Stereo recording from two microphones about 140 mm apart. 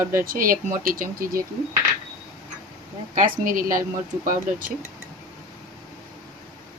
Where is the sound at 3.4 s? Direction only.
75° right (ahead or behind).